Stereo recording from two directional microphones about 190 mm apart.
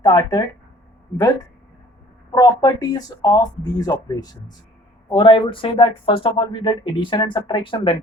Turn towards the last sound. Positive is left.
turn(degrees=25)  # may be behind; listen again after turning